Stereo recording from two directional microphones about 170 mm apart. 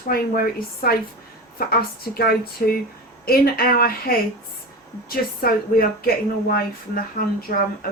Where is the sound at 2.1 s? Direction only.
65° left (ahead or behind).